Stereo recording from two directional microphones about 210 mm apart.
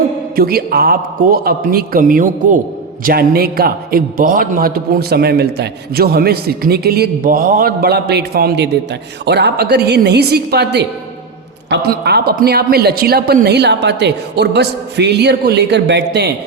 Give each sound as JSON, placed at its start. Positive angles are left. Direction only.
{"t": 0.3, "sound": "a man's voice", "side_deg": -45}